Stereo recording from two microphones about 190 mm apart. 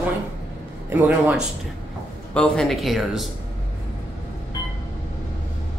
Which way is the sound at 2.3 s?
5° left (ahead or behind).